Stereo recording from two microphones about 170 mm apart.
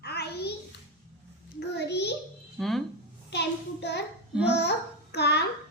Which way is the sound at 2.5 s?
Centre (ahead or behind).